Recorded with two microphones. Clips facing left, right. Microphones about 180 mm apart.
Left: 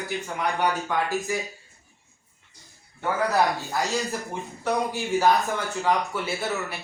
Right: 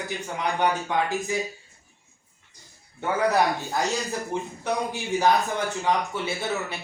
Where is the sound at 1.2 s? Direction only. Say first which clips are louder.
Right 1 dB; 15° right (ahead or behind).